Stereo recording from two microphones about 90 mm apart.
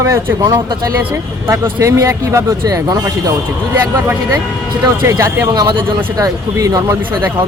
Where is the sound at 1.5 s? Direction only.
35° right (ahead or behind).